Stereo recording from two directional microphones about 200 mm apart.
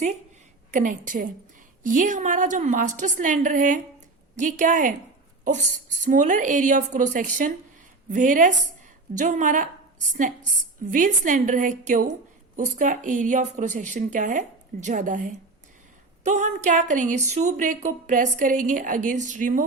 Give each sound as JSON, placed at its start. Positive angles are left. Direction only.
{"t": 0.7, "sound": "a woman's voice", "side_deg": -40}